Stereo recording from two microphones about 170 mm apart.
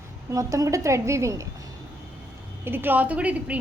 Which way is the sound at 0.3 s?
20° right (ahead or behind).